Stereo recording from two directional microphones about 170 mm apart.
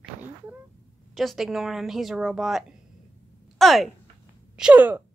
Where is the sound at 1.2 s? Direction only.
Centre (ahead or behind).